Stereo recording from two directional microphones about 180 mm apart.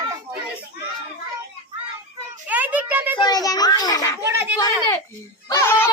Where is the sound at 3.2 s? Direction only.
20° left (ahead or behind).